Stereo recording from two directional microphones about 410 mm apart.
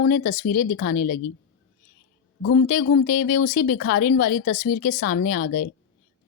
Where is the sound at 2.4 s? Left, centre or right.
Left.